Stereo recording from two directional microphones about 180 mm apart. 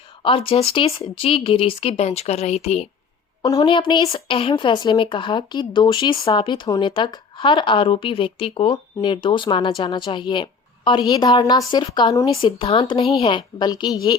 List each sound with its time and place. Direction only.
0.2 s speech: 30° left (ahead or behind)